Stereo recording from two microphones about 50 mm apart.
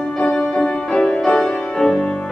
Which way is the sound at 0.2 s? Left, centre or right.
Centre.